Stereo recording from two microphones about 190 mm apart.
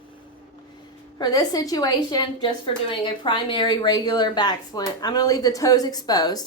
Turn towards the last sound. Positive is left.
turn(degrees=20)  # may be behind; listen again after turning